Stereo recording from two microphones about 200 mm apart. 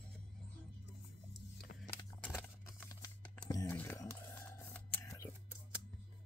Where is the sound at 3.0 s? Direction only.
20° left (ahead or behind).